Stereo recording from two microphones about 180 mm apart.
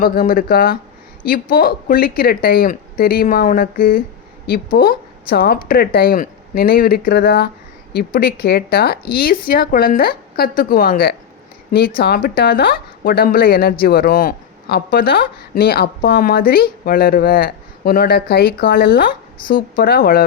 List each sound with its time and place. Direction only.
0.0 s a woman's voice: 55° left (ahead or behind)